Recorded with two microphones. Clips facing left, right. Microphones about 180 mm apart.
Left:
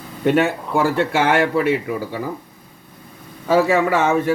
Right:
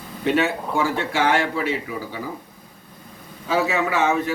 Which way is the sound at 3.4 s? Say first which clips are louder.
Left 6 dB; 55° left (ahead or behind).